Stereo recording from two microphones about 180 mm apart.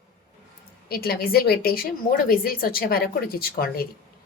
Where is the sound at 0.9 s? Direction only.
60° left (ahead or behind).